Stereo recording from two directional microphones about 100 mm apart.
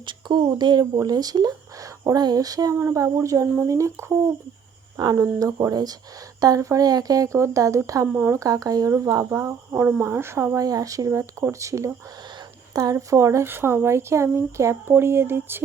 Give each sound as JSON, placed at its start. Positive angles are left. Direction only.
{"t": 0.0, "sound": "speech", "side_deg": -50}